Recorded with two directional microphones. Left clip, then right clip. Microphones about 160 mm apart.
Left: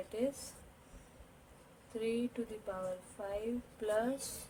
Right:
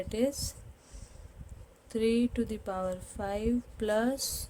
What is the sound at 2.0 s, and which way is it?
Speech, 90° right.